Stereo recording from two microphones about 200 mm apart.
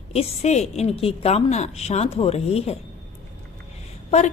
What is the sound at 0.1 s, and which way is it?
A woman's voice, 30° left (ahead or behind).